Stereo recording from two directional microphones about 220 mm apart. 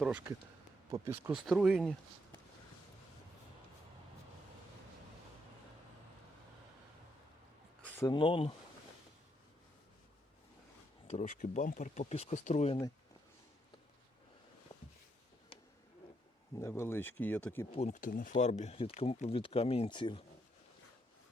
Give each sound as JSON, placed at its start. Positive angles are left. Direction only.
{"t": 0.0, "sound": "speech", "side_deg": -5}
{"t": 7.9, "sound": "speech", "side_deg": 20}
{"t": 11.1, "sound": "speech", "side_deg": 35}
{"t": 16.6, "sound": "speech", "side_deg": 10}
{"t": 17.7, "sound": "speech", "side_deg": 30}